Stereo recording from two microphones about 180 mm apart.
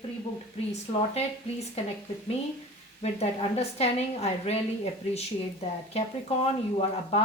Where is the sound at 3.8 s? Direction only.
35° left (ahead or behind).